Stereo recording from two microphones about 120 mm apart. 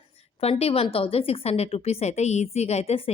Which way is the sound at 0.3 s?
55° left (ahead or behind).